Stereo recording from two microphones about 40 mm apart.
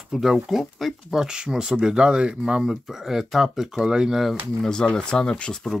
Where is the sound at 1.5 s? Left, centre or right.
Centre.